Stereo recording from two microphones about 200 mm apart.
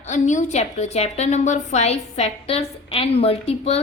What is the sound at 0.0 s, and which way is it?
A woman's voice, 35° left (ahead or behind).